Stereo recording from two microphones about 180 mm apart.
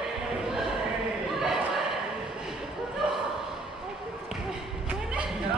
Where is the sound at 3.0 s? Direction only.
5° right (ahead or behind).